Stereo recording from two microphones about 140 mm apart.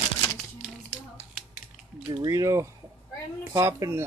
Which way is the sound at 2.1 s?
25° right (ahead or behind).